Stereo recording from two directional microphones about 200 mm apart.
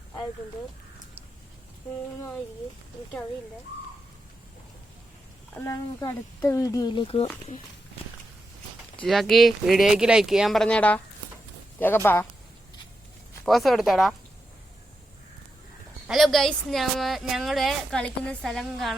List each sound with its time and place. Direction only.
5.5 s speech: 15° left (ahead or behind); by 7.6 s 30° left (ahead or behind)
9.0 s speech: centre (ahead or behind)
13.4 s speech: centre (ahead or behind)
16.0 s speech: centre (ahead or behind)